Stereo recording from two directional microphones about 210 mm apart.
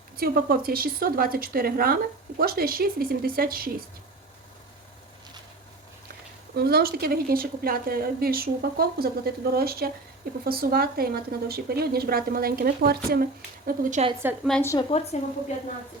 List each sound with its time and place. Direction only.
0.2 s a woman's voice: 45° right (ahead or behind)
6.6 s a woman's voice: 50° right (ahead or behind)
13.7 s a woman's voice: 35° right (ahead or behind)
14.1 s a woman's voice: 10° right (ahead or behind)
14.4 s a woman's voice: 5° left (ahead or behind)
14.7 s a woman's voice: 25° left (ahead or behind)